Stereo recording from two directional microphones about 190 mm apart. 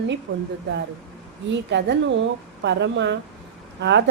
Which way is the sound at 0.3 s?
85° right.